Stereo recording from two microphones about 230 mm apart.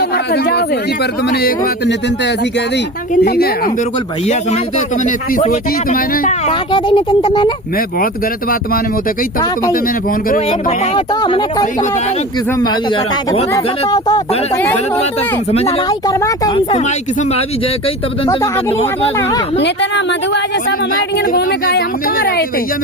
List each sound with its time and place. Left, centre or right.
1.3 s speech: left
3.2 s speech: left
6.5 s speech: left
10.2 s speech: left
10.9 s speech: centre
13.5 s speech: centre
15.5 s speech: left
19.5 s speech: left
21.3 s speech: left